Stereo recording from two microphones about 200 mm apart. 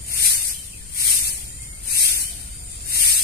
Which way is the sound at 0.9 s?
50° left (ahead or behind).